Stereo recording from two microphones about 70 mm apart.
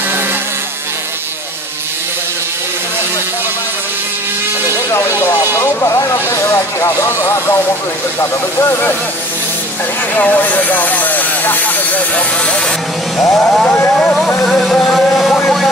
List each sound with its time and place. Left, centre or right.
4.9 s speech: left
10.1 s speech: left
13.3 s vehicle: centre
13.9 s speech: centre
14.4 s vehicle: centre
15.1 s a sound: centre